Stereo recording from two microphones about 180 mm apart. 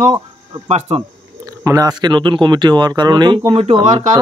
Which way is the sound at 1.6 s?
20° right (ahead or behind).